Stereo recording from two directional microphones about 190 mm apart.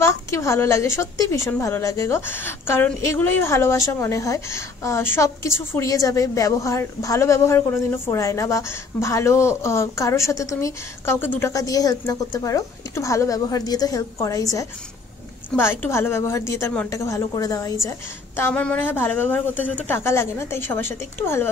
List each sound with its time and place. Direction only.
0.0 s a woman's voice: 15° left (ahead or behind)